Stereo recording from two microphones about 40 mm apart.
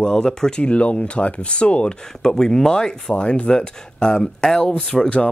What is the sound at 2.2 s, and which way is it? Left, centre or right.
Speech, centre.